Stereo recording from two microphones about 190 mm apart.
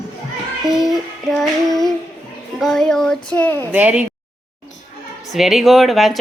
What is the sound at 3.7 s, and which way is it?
Speech, 10° right (ahead or behind).